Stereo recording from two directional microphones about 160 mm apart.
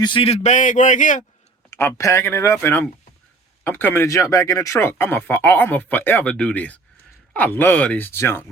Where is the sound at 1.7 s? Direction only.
15° left (ahead or behind).